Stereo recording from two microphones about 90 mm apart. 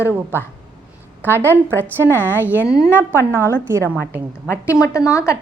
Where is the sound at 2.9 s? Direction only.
25° right (ahead or behind).